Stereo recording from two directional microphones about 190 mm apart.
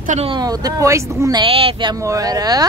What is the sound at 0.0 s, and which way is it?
Speech, 40° right (ahead or behind).